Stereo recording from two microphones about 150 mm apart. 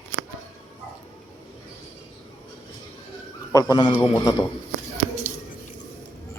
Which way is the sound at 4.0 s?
15° left (ahead or behind).